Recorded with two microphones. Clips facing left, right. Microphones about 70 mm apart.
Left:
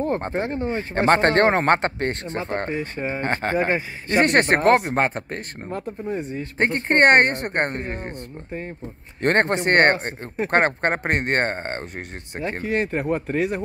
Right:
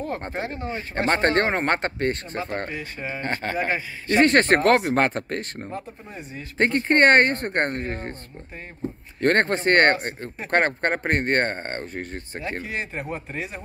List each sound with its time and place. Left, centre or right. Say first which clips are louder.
0.0 s speech: left 5 dB; left
4.6 s speech: left 1 dB; centre
5.7 s speech: left 7 dB; left
7.4 s speech: even; left
9.2 s speech: left 1 dB; left
12.4 s speech: left 6 dB; left